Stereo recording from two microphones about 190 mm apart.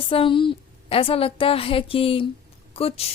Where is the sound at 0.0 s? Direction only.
30° left (ahead or behind).